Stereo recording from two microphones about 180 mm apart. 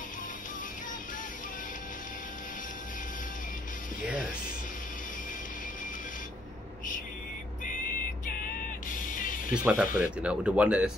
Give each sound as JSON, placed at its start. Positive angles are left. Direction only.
{"t": 8.9, "sound": "music", "side_deg": 50}
{"t": 9.9, "sound": "speech", "side_deg": -5}